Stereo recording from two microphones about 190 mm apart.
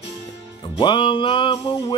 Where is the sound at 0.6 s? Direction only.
25° left (ahead or behind).